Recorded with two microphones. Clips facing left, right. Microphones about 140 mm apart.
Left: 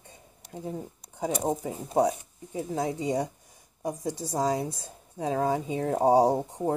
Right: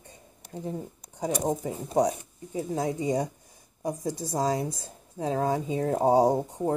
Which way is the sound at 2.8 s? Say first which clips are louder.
Right 1 dB; 15° left (ahead or behind).